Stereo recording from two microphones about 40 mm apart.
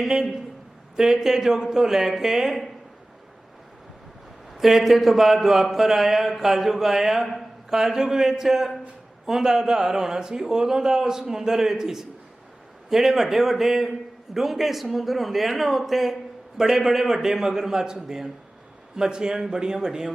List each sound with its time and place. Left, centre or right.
0.0 s a man's voice: centre
4.5 s a man's voice: centre